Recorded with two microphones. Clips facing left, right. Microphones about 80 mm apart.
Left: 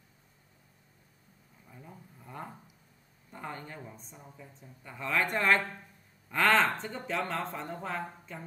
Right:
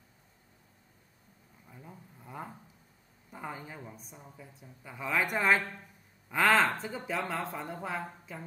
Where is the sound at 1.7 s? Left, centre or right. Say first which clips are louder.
Even; centre.